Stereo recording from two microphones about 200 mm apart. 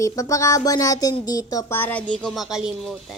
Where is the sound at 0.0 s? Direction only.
15° left (ahead or behind).